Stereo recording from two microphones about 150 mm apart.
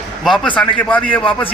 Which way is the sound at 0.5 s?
10° left (ahead or behind).